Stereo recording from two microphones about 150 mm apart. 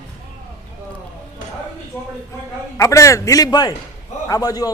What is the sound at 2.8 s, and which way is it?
A man's voice, 20° left (ahead or behind).